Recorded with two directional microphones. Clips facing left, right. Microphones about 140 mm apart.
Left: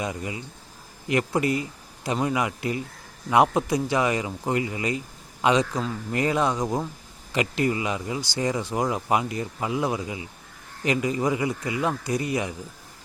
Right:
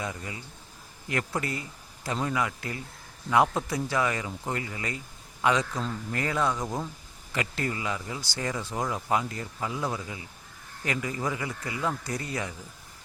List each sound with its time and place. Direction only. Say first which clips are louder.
0.0 s speech: left 5 dB; 20° left (ahead or behind)